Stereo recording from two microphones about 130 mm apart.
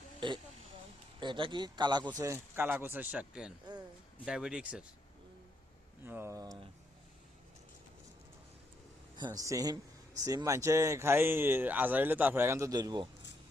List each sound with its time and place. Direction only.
0.2 s speech: 40° right (ahead or behind); by 4.9 s 10° right (ahead or behind)
6.1 s speech: 20° right (ahead or behind)
9.1 s speech: 30° right (ahead or behind)